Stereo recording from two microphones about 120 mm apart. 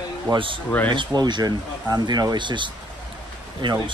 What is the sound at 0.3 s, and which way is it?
Speech, 45° right (ahead or behind).